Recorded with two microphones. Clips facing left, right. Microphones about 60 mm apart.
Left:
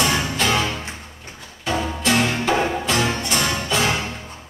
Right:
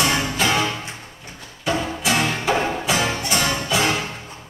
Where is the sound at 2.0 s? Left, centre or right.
Centre.